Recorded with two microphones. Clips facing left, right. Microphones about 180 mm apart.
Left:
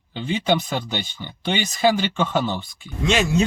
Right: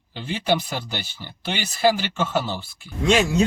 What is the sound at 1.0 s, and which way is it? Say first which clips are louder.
Speech: left 4 dB; 5° right (ahead or behind).